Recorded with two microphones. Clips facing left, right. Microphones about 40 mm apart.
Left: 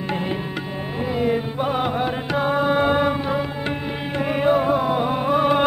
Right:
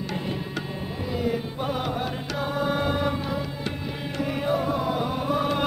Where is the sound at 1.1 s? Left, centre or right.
Left.